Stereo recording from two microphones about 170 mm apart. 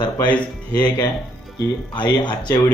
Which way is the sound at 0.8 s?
25° left (ahead or behind).